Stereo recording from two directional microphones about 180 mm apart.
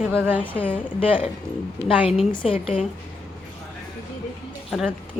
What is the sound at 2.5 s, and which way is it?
Speech, 30° left (ahead or behind).